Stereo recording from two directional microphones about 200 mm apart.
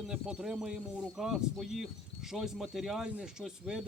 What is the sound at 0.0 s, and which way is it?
Speech, 5° right (ahead or behind).